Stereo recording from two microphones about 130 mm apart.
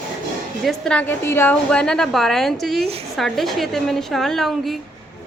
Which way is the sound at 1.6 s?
5° left (ahead or behind).